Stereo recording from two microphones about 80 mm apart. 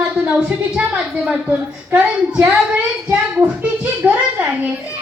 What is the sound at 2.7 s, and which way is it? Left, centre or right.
A woman's voice, centre.